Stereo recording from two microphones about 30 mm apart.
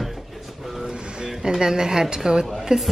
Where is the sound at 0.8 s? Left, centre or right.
Right.